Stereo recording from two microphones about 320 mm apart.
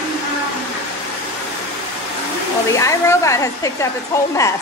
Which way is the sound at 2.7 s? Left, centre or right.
Centre.